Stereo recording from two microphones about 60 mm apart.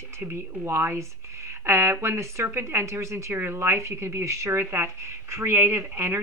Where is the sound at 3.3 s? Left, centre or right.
Right.